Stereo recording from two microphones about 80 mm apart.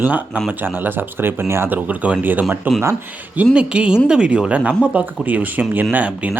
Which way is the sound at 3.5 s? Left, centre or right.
Centre.